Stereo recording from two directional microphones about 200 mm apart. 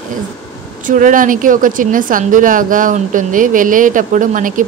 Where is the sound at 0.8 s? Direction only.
40° right (ahead or behind).